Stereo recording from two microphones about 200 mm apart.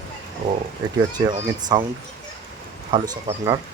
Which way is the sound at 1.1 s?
20° right (ahead or behind).